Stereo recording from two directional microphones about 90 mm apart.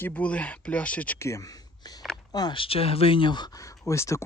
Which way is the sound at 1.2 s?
35° left (ahead or behind).